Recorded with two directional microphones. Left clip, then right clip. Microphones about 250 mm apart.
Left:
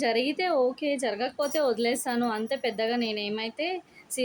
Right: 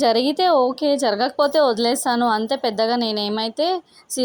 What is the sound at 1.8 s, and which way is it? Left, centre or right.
A woman's voice, centre.